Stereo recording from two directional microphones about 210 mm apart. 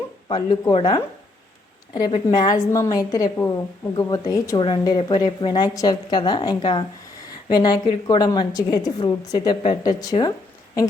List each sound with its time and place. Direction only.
0.3 s a woman's voice: 20° left (ahead or behind)